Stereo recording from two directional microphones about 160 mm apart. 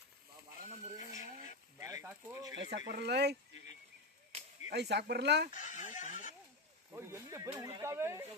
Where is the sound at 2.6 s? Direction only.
90° right.